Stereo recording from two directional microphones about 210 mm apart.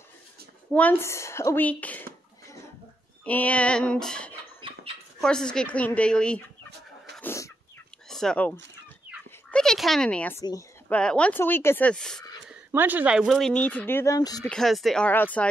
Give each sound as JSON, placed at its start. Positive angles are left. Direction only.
{"t": 0.7, "sound": "a woman's voice", "side_deg": 5}
{"t": 3.3, "sound": "speech", "side_deg": 5}
{"t": 4.6, "sound": "a sound", "side_deg": -25}
{"t": 5.2, "sound": "speech", "side_deg": 5}
{"t": 7.2, "sound": "chicken", "side_deg": 10}
{"t": 8.1, "sound": "speech", "side_deg": 0}
{"t": 12.7, "sound": "speech", "side_deg": -10}
{"t": 14.4, "sound": "speech", "side_deg": 0}